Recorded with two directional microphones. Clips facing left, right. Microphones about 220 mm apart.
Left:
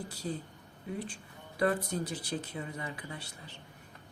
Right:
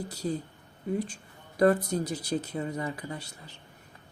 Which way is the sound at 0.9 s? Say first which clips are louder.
Right 7 dB; 40° right (ahead or behind).